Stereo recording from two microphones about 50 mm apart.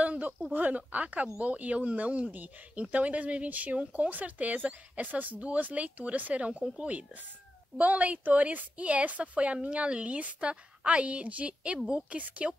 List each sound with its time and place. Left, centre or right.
0.0 s a sound: right
0.5 s speech: right
4.6 s speech: right
5.0 s speech: right